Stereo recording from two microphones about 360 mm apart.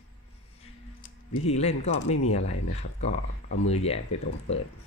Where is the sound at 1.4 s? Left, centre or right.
Centre.